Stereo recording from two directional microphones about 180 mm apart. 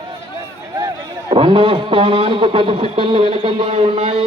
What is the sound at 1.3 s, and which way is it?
A man's voice, 30° right (ahead or behind).